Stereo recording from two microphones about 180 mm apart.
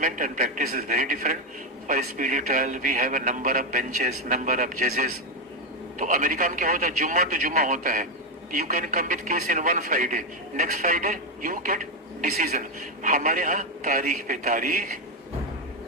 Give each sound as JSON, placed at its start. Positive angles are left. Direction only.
{"t": 0.0, "sound": "a man's voice", "side_deg": -45}